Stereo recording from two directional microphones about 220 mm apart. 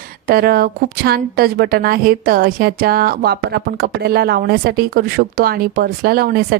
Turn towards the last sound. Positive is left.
turn(degrees=-45)  # may be behind; listen again after turning